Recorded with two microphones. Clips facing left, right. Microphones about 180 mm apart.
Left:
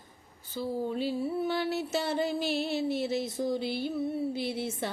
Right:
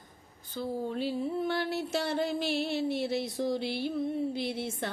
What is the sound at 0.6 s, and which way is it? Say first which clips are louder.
Mantra: left 1 dB; 5° left (ahead or behind).